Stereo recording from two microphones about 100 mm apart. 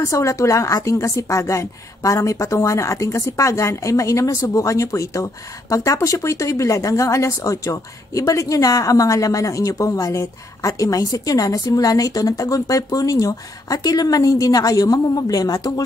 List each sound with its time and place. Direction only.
0.0 s a woman's voice: 30° left (ahead or behind)